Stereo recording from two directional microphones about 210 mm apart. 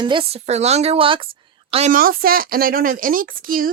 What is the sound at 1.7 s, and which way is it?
A woman's voice, 35° right (ahead or behind).